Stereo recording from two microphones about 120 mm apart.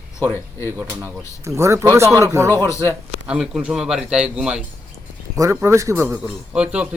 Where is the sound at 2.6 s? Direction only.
25° left (ahead or behind).